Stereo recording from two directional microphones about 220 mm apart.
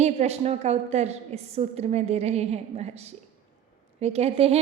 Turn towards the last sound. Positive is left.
turn(degrees=-25)  # may be behind; listen again after turning